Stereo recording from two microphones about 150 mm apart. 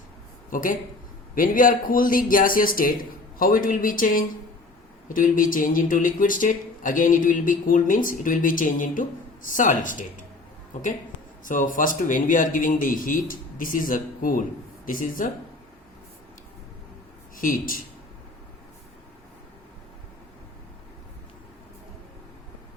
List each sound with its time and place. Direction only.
0.5 s speech: 65° left (ahead or behind)
11.4 s speech: 60° left (ahead or behind)
17.3 s speech: 65° left (ahead or behind)